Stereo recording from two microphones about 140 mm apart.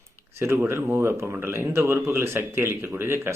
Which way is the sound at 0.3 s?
20° right (ahead or behind).